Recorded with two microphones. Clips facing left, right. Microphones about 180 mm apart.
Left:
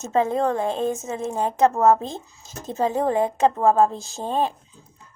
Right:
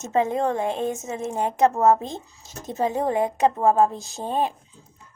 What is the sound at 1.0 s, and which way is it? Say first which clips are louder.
Speech: left 1 dB; 30° left (ahead or behind).